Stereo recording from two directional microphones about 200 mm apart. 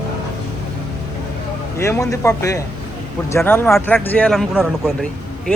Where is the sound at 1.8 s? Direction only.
15° left (ahead or behind).